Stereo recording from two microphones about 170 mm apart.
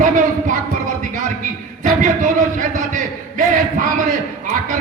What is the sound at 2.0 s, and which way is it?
A man's voice, 50° right (ahead or behind).